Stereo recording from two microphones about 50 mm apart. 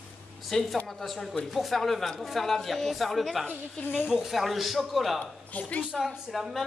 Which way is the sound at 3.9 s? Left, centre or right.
Centre.